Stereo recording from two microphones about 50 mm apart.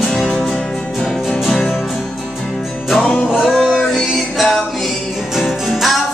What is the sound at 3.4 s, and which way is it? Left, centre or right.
Music, centre.